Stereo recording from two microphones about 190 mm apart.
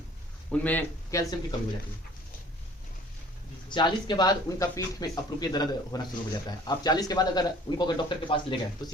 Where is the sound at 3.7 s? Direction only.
25° left (ahead or behind).